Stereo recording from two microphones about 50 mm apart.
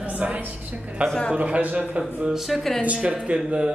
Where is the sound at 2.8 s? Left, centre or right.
Right.